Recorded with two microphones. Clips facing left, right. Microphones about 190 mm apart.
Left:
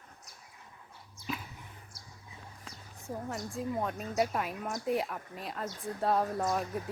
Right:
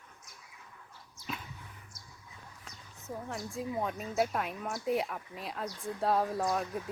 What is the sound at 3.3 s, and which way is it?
A woman's voice, centre (ahead or behind).